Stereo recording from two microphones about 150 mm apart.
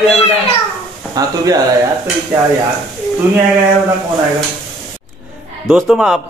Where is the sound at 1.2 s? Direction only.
25° right (ahead or behind).